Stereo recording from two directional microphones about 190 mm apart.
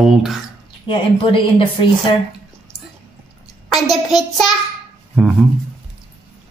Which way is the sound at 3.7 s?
Centre (ahead or behind).